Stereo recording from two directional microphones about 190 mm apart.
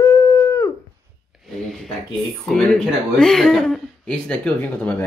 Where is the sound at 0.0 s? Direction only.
20° left (ahead or behind).